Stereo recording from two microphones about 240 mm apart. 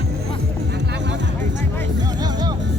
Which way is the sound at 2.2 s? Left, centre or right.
Centre.